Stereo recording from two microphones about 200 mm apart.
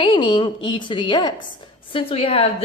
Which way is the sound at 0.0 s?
25° left (ahead or behind).